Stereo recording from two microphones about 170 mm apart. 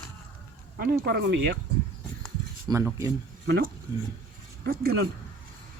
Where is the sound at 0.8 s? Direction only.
75° right (ahead or behind).